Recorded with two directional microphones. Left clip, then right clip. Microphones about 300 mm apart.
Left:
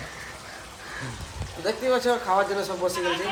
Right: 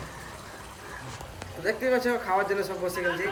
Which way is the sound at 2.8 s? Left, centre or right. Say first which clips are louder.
Left 4 dB; centre.